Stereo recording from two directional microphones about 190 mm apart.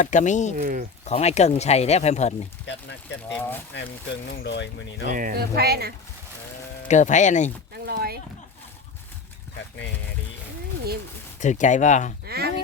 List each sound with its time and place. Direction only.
0.0 s speech: 40° left (ahead or behind)
0.5 s speech: 50° right (ahead or behind)
1.0 s speech: 35° left (ahead or behind)
2.6 s speech: 70° left (ahead or behind)
4.3 s speech: 65° left (ahead or behind)
5.0 s speech: 45° right (ahead or behind)
6.8 s speech: 40° left (ahead or behind)
7.9 s speech: 55° right (ahead or behind)
11.3 s speech: 40° left (ahead or behind)
12.2 s speech: 55° right (ahead or behind)